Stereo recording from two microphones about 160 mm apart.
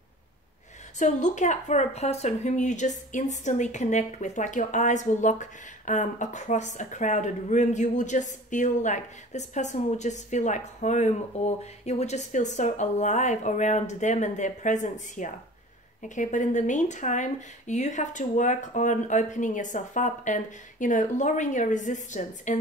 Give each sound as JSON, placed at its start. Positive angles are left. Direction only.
{"t": 0.9, "sound": "speech", "side_deg": 50}